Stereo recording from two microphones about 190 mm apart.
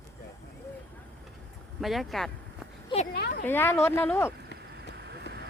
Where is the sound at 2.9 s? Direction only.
25° left (ahead or behind).